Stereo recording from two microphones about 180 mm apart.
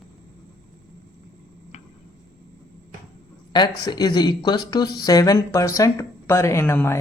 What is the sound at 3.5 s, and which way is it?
Speech, 25° left (ahead or behind).